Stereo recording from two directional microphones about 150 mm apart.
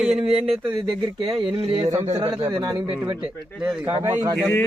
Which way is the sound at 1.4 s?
40° right (ahead or behind).